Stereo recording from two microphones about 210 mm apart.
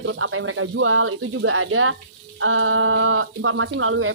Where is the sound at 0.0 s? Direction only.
65° right (ahead or behind).